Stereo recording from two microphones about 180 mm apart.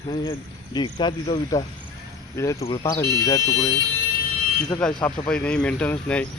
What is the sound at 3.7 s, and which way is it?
Speech, 25° right (ahead or behind).